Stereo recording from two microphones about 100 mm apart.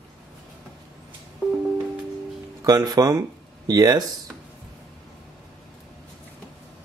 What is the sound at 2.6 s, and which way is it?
Speech, 40° right (ahead or behind).